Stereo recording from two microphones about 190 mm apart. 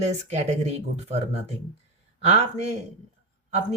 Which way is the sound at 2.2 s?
35° right (ahead or behind).